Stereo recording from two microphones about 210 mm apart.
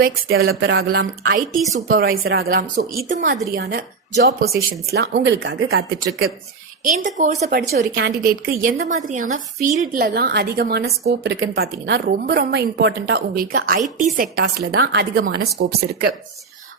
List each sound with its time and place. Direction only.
0.0 s a woman's voice: 45° right (ahead or behind)
0.4 s a woman's voice: 65° right (ahead or behind)
7.0 s a woman's voice: 35° right (ahead or behind)
7.7 s a woman's voice: 50° right (ahead or behind)
13.3 s a woman's voice: 40° right (ahead or behind)